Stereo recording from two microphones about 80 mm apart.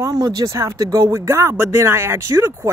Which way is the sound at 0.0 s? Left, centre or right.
Right.